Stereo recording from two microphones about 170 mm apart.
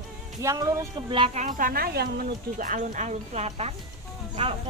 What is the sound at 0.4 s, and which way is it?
Speech, 15° right (ahead or behind).